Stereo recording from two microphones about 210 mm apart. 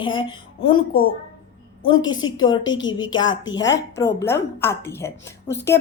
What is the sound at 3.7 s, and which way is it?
A woman's voice, 15° left (ahead or behind).